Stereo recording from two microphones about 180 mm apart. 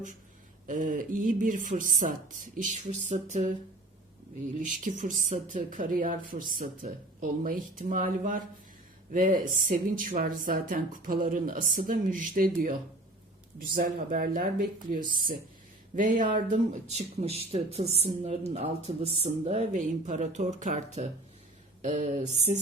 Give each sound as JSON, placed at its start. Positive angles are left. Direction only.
{"t": 0.7, "sound": "speech", "side_deg": -50}
{"t": 4.8, "sound": "speech", "side_deg": -45}
{"t": 16.0, "sound": "speech", "side_deg": -45}